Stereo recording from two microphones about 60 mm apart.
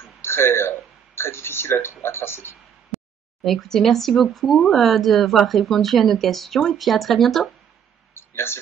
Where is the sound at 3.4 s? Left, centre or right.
Centre.